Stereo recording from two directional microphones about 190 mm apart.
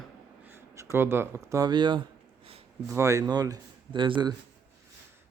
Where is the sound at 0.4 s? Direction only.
15° right (ahead or behind).